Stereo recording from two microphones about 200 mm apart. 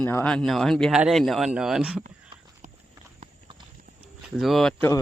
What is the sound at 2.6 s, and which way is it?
Horse, 40° right (ahead or behind).